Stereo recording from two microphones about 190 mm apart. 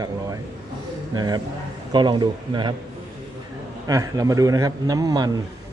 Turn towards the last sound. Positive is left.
turn(degrees=-20)  # may be behind; listen again after turning